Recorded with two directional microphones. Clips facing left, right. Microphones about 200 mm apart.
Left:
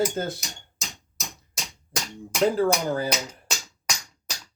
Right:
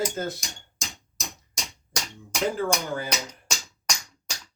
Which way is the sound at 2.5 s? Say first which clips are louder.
Left 4 dB; 35° left (ahead or behind).